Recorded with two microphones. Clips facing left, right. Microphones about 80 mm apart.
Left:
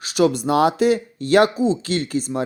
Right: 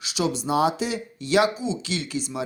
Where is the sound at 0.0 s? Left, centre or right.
Left.